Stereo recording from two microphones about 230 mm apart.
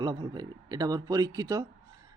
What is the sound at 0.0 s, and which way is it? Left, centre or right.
A man's voice, centre.